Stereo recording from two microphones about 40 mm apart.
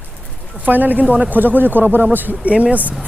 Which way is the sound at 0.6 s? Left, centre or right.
Right.